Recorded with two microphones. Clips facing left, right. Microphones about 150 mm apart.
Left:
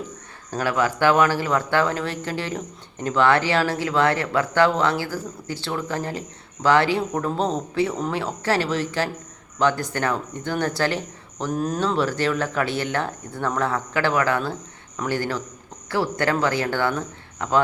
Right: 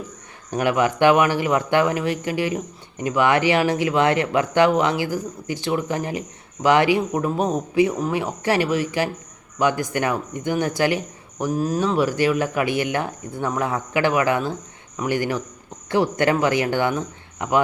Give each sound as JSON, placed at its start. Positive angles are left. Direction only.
{"t": 0.5, "sound": "speech", "side_deg": -20}